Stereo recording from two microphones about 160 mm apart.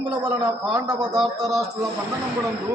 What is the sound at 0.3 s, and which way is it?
Speech, 20° right (ahead or behind).